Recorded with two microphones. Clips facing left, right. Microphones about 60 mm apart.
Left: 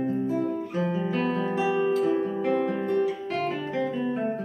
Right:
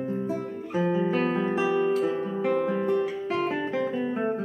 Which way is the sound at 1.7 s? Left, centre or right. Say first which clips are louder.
Left 3 dB; centre.